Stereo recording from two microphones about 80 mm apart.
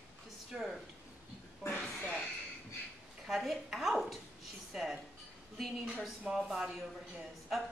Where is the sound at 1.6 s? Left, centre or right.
Left.